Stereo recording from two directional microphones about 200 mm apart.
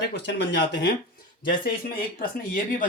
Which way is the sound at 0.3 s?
60° left (ahead or behind).